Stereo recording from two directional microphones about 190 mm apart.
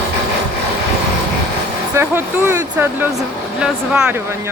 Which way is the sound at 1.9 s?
10° right (ahead or behind).